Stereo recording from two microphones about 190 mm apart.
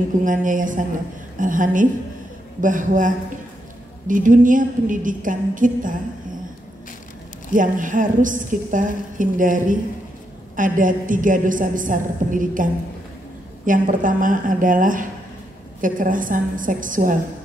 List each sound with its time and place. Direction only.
0.2 s a woman's voice: 45° right (ahead or behind)
4.1 s a woman's voice: 45° right (ahead or behind)
7.5 s a woman's voice: 45° right (ahead or behind)
13.7 s a woman's voice: 45° right (ahead or behind)